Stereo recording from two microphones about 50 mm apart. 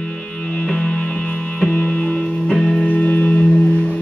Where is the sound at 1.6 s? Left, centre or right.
Left.